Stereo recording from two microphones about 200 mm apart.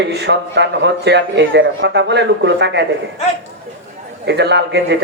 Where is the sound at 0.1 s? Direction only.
55° right (ahead or behind).